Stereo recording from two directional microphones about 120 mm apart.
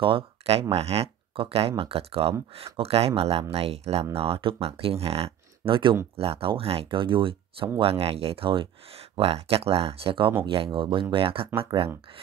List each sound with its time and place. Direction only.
0.0 s speech: 50° right (ahead or behind)